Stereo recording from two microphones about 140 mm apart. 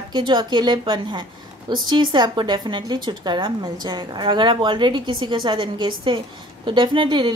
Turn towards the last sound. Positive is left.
turn(degrees=-35)  # may be behind; listen again after turning